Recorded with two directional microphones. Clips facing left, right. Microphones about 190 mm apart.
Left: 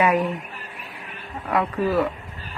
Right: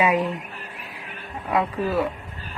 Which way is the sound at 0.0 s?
20° right (ahead or behind).